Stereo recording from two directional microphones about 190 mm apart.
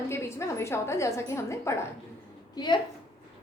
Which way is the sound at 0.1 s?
15° left (ahead or behind).